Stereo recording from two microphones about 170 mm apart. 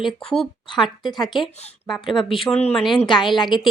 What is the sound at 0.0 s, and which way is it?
Speech, centre (ahead or behind).